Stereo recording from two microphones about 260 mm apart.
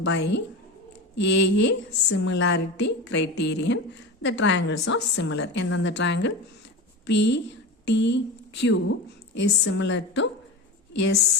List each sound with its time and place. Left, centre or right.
0.0 s a woman's voice: left